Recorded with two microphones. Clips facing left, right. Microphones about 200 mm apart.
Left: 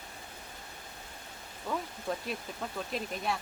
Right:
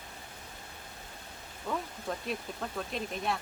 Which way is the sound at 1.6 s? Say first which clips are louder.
Left 1 dB; centre (ahead or behind).